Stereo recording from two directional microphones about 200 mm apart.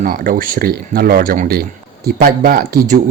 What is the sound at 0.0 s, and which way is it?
Speech, 45° right (ahead or behind).